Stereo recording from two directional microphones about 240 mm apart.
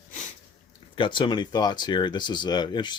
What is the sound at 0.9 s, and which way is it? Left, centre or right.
Speech, left.